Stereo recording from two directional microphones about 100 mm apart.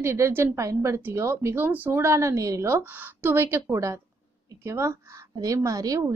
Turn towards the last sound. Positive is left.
turn(degrees=-35)  # may be behind; listen again after turning